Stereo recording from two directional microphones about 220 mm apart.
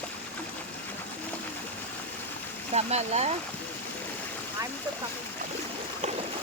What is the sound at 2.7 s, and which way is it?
Speech, 30° right (ahead or behind).